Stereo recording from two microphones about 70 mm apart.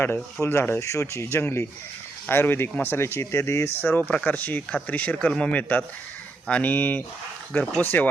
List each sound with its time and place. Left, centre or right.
0.4 s speech: left
0.8 s speech: left